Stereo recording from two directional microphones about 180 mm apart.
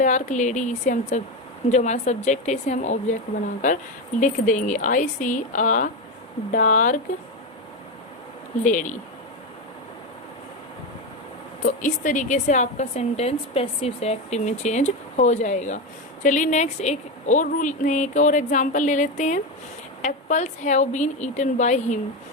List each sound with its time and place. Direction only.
0.0 s a woman's voice: 40° left (ahead or behind)
4.2 s a woman's voice: 45° left (ahead or behind)
8.6 s a woman's voice: 45° left (ahead or behind)
11.6 s a woman's voice: 45° left (ahead or behind)